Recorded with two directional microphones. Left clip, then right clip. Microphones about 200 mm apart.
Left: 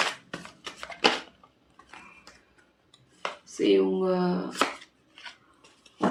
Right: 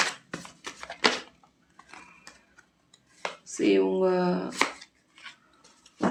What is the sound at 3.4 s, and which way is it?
Speech, 35° right (ahead or behind).